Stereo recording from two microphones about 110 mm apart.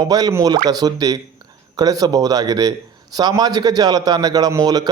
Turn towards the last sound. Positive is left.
turn(degrees=-35)  # may be behind; listen again after turning